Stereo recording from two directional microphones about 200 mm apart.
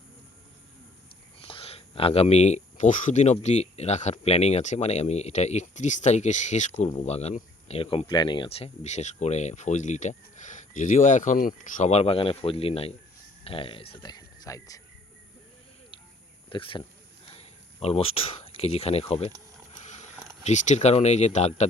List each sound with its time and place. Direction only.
1.4 s speech: 25° left (ahead or behind)
16.5 s speech: 25° left (ahead or behind)